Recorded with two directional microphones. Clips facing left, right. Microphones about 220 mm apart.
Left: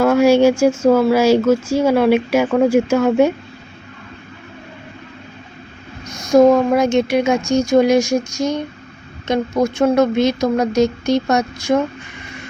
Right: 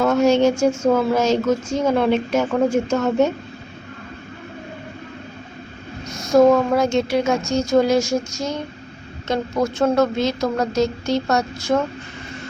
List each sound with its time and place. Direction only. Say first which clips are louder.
0.0 s a woman's voice: left 4 dB; 10° left (ahead or behind)
6.3 s a woman's voice: left 3 dB; 15° left (ahead or behind)